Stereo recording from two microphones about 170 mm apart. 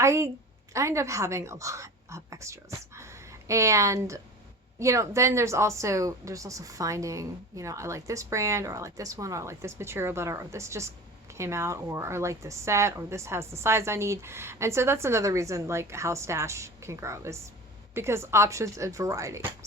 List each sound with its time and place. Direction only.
0.0 s a woman's voice: 15° right (ahead or behind)